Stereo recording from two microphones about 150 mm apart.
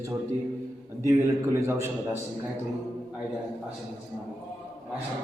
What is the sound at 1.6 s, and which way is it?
Speech, 20° right (ahead or behind).